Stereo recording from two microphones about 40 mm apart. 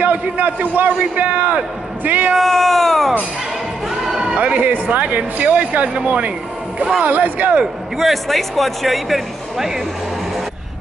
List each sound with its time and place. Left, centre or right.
0.0 s speech: right
2.3 s speech: centre
4.4 s speech: right
8.0 s speech: centre